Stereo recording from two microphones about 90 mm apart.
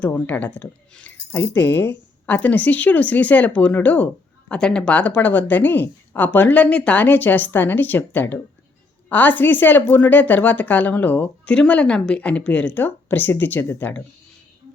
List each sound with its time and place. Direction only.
0.0 s speech: 20° left (ahead or behind)